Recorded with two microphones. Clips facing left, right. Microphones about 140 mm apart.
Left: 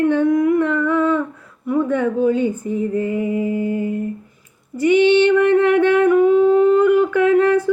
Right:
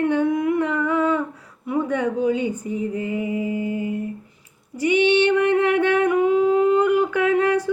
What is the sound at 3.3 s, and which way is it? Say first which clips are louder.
Humming: left 4 dB; 45° left (ahead or behind).